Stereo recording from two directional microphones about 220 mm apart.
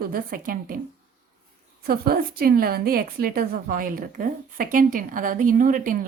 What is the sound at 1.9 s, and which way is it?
A woman's voice, 45° right (ahead or behind).